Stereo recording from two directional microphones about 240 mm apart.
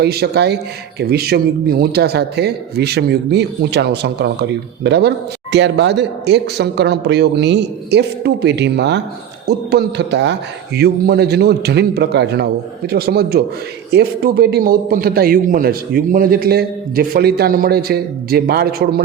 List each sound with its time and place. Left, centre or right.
0.0 s a man's voice: right